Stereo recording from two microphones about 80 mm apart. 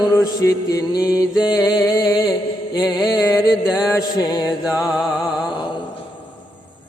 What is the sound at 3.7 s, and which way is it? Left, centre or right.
Mantra, centre.